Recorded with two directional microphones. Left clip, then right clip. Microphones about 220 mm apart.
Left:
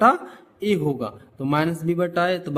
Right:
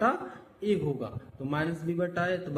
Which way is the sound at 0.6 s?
50° left (ahead or behind).